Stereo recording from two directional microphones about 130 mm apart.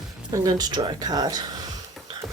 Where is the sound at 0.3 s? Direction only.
30° right (ahead or behind).